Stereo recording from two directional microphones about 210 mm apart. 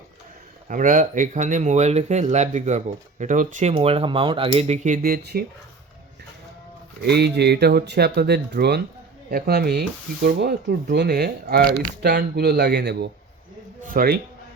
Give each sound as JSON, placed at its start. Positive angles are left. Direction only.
{"t": 0.7, "sound": "speech", "side_deg": -40}
{"t": 7.0, "sound": "speech", "side_deg": -50}